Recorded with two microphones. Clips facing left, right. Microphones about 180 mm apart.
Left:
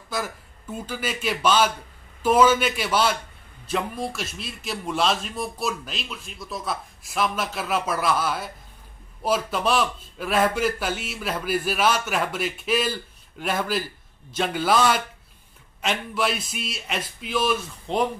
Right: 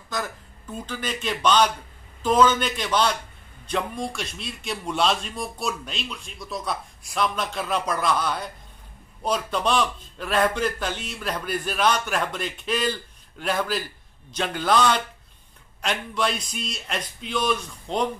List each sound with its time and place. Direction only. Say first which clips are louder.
0.1 s a man's voice: left 1 dB; 10° left (ahead or behind)